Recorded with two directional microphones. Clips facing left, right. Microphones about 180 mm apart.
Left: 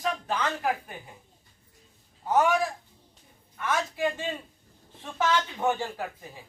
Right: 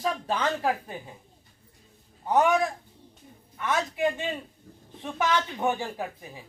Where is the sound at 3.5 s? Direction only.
20° right (ahead or behind).